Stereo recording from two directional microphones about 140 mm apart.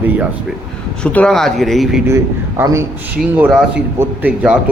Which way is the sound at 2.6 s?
20° right (ahead or behind).